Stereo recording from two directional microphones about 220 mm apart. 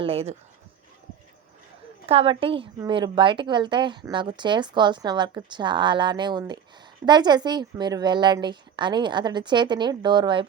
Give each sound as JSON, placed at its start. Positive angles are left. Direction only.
{"t": 0.0, "sound": "a woman's voice", "side_deg": -25}
{"t": 2.0, "sound": "a woman's voice", "side_deg": -25}